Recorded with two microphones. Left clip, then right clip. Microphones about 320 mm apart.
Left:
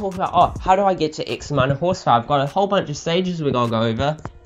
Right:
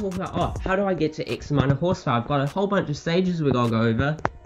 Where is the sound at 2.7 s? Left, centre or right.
Centre.